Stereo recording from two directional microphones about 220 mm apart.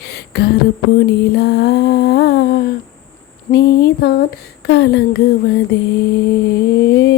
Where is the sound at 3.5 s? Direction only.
50° left (ahead or behind).